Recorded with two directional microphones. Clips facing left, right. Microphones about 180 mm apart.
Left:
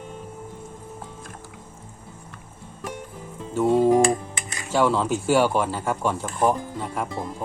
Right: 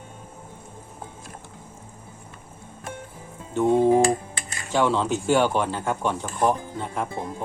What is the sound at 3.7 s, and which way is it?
Music, 20° right (ahead or behind).